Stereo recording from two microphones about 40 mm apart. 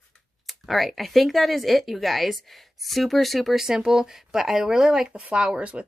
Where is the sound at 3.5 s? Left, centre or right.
Centre.